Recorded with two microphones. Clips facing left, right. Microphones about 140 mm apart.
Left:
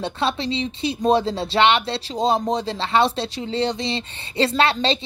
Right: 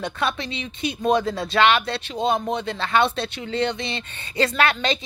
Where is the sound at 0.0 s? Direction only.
30° left (ahead or behind).